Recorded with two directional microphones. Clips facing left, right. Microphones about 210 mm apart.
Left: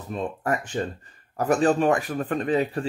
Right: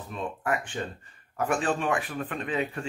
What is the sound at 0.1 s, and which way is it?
Speech, 40° left (ahead or behind).